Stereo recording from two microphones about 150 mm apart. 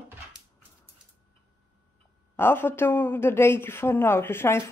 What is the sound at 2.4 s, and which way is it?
A woman's voice, 15° left (ahead or behind).